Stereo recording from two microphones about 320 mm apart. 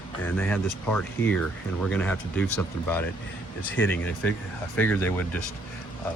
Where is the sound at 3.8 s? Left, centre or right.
Centre.